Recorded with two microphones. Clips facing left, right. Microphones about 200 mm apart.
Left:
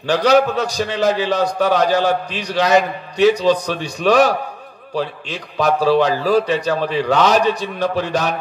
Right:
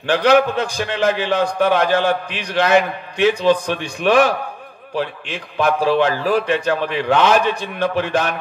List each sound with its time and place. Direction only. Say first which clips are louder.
0.1 s a man's voice: even; 40° left (ahead or behind)